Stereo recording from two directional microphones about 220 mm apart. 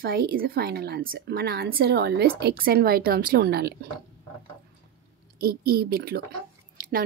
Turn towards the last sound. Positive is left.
turn(degrees=-40)  # may be behind; listen again after turning